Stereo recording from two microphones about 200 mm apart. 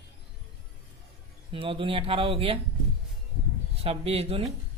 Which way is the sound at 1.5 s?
25° right (ahead or behind).